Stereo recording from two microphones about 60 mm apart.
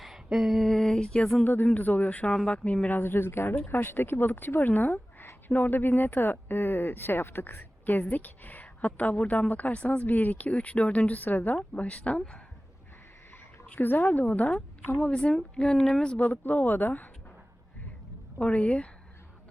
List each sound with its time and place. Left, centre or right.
0.0 s a sound: centre
1.6 s speech: left
2.3 s speech: centre
2.9 s speech: left; by 12.4 s centre
13.7 s speech: left
15.0 s speech: centre; by 17.1 s left
18.3 s speech: centre